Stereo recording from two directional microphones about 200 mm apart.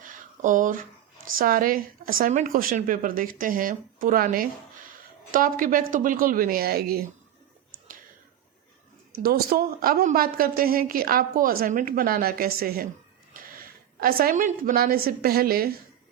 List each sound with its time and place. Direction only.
0.0 s a sound: 40° right (ahead or behind)
1.4 s speech: 45° right (ahead or behind)
9.2 s a woman's voice: 50° right (ahead or behind)